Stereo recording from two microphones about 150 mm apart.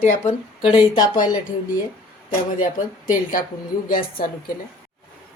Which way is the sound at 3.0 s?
65° left (ahead or behind).